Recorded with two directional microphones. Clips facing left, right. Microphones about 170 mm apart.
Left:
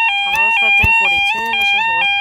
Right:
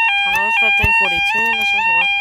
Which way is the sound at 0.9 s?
25° left (ahead or behind).